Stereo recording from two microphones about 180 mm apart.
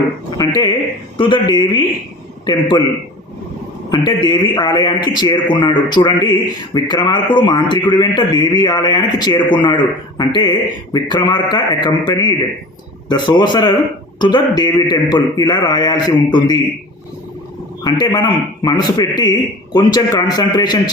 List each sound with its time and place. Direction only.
0.3 s a man's voice: 20° left (ahead or behind)
4.0 s a man's voice: 25° left (ahead or behind)
17.8 s a man's voice: 25° left (ahead or behind)